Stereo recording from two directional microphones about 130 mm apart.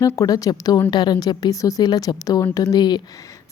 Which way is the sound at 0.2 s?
25° left (ahead or behind).